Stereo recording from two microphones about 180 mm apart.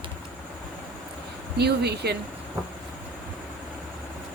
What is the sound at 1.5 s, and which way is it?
Speech, 65° right (ahead or behind).